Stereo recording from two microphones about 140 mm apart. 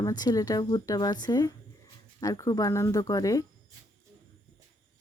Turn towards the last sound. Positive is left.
turn(degrees=25)  # may be behind; listen again after turning